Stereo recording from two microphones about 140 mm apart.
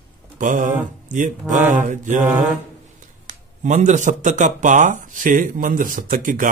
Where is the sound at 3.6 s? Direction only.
60° right (ahead or behind).